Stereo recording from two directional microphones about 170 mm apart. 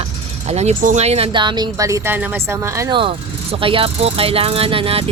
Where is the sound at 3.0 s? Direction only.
30° right (ahead or behind).